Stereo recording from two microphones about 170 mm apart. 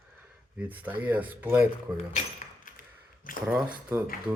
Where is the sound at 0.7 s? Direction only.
10° right (ahead or behind).